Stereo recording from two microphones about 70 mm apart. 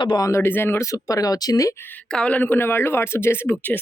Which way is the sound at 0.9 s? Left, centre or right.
Left.